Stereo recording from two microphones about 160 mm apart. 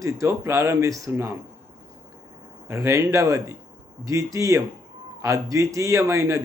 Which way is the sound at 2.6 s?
15° right (ahead or behind).